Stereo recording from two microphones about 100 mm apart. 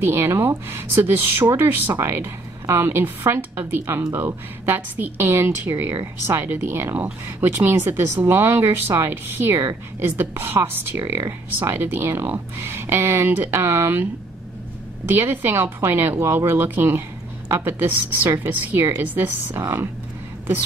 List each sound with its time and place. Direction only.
0.0 s a woman's voice: 25° right (ahead or behind)
15.0 s a woman's voice: 20° right (ahead or behind)